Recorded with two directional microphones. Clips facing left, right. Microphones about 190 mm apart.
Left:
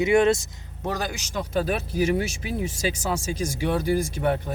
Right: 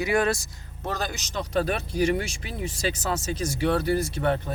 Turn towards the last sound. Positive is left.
turn(degrees=10)  # may be behind; listen again after turning